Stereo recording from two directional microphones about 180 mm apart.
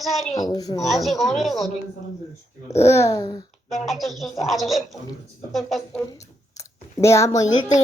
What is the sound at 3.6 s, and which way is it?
Speech, centre (ahead or behind).